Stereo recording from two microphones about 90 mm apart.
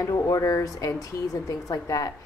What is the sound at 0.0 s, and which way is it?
Speech, 40° left (ahead or behind).